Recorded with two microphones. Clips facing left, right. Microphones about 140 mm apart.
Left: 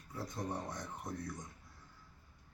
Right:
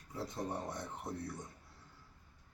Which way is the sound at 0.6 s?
25° right (ahead or behind).